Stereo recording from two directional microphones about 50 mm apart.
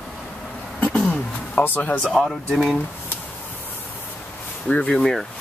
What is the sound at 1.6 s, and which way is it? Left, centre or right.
Speech, left.